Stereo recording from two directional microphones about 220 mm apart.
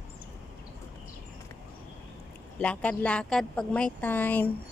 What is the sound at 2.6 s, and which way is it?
A woman's voice, 5° left (ahead or behind).